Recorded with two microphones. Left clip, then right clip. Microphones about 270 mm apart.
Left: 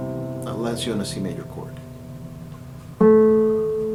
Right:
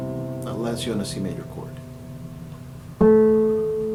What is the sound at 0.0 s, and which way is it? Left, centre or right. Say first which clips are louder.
Music: left 1 dB; left.